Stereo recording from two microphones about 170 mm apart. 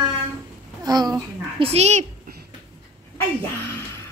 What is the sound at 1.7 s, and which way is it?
Speech, 40° right (ahead or behind).